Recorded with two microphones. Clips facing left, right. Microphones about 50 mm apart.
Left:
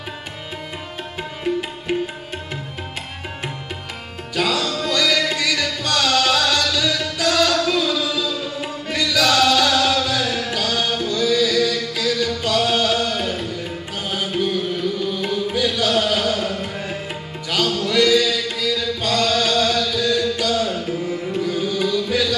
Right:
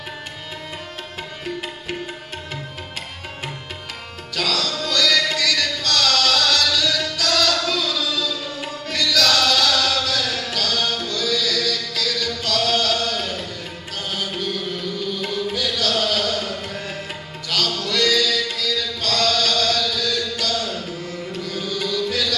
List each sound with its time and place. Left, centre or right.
4.4 s music: centre